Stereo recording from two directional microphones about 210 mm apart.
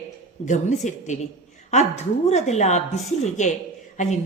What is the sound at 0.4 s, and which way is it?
A woman's voice, 35° left (ahead or behind).